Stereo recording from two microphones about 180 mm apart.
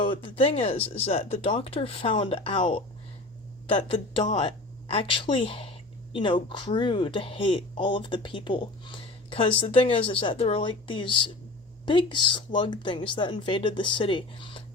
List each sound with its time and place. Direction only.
0.0 s speech: 30° left (ahead or behind)